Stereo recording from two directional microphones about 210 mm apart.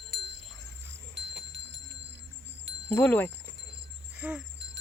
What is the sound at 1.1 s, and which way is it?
Music, 55° right (ahead or behind).